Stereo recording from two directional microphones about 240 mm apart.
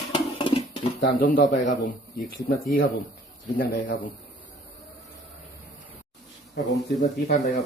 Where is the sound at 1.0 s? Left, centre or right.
Left.